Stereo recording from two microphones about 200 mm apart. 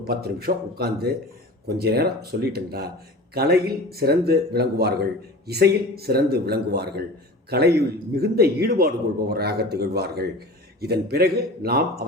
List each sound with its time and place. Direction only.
0.0 s a man's voice: 50° right (ahead or behind)